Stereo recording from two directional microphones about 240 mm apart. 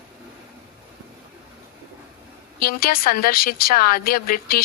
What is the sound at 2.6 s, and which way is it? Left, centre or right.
A woman's voice, left.